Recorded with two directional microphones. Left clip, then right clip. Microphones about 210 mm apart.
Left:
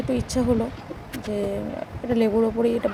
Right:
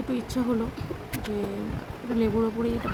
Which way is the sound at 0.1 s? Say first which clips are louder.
Left 5 dB; 15° left (ahead or behind).